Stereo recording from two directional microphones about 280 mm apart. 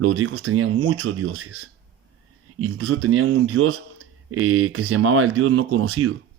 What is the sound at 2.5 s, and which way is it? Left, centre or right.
Speech, right.